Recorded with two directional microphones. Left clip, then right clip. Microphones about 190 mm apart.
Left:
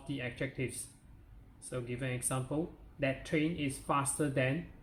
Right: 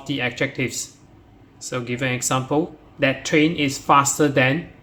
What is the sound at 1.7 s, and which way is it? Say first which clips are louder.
Speech: right 15 dB; 25° right (ahead or behind).